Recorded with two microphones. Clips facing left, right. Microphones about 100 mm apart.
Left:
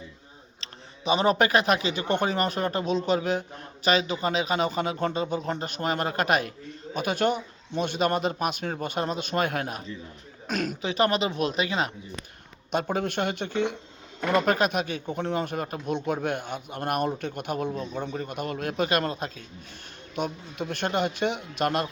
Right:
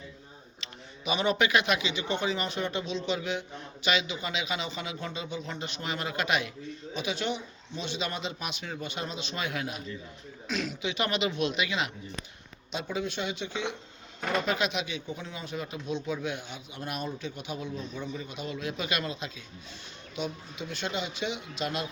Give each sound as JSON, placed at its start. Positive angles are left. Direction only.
{"t": 0.6, "sound": "speech", "side_deg": 35}
{"t": 12.7, "sound": "speech", "side_deg": 55}